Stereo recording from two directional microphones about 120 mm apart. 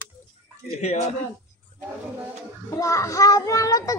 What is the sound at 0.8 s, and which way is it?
Speech, 65° left (ahead or behind).